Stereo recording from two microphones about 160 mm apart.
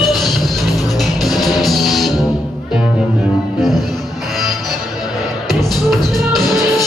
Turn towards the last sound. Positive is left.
turn(degrees=0)  # may be behind; listen again after turning